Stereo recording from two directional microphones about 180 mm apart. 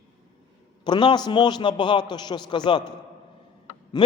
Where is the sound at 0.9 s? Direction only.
25° left (ahead or behind).